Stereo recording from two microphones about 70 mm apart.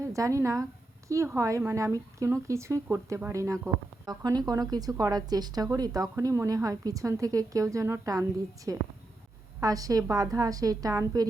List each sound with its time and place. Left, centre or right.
0.0 s speech: right
4.0 s a woman's voice: right